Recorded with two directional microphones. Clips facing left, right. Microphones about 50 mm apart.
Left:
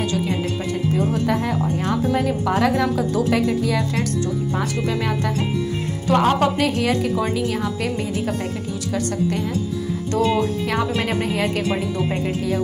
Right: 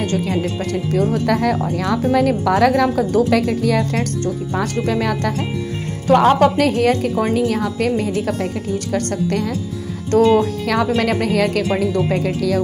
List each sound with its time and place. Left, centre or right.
0.0 s a woman's voice: right
0.9 s a woman's voice: right
6.0 s a woman's voice: right